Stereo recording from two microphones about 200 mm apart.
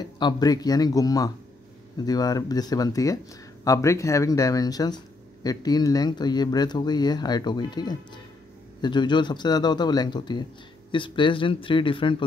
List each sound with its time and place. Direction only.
0.0 s speech: 20° left (ahead or behind)